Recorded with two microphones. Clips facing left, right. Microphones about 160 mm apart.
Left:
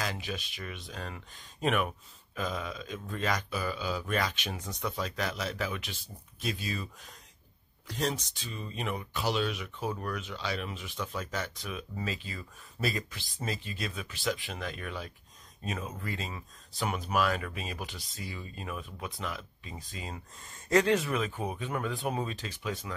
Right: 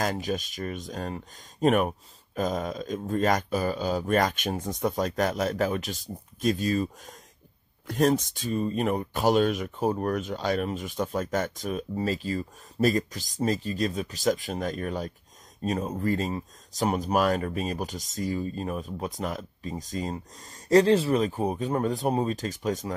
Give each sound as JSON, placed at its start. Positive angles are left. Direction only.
{"t": 0.0, "sound": "speech", "side_deg": -45}